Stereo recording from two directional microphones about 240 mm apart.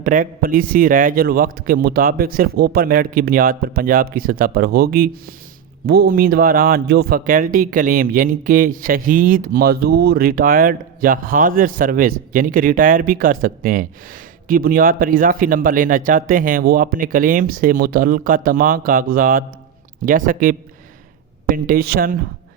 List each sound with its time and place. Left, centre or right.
0.0 s speech: right